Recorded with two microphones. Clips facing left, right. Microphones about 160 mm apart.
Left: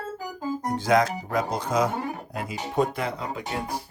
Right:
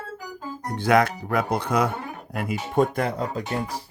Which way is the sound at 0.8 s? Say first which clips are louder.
Right 3 dB; 60° right (ahead or behind).